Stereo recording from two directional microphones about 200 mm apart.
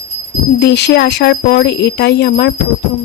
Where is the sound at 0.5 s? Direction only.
60° left (ahead or behind).